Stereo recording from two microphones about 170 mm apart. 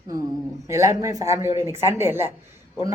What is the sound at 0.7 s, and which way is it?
Speech, 15° right (ahead or behind).